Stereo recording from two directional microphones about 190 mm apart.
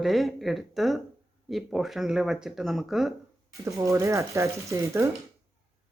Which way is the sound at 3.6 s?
15° right (ahead or behind).